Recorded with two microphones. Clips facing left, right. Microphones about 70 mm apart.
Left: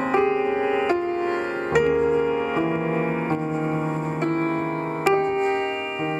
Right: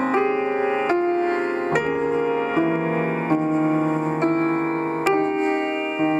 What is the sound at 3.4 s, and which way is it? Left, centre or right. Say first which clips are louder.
Music: right 5 dB; right.